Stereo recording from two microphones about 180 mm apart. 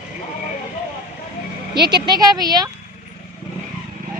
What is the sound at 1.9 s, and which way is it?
Speech, 20° right (ahead or behind).